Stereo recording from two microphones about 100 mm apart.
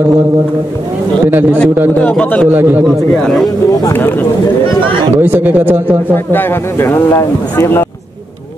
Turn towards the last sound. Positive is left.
turn(degrees=25)  # may be behind; listen again after turning